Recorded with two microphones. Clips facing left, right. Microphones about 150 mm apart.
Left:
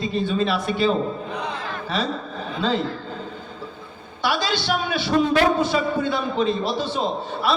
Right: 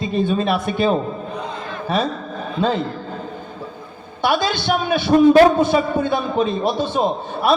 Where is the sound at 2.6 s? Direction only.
55° right (ahead or behind).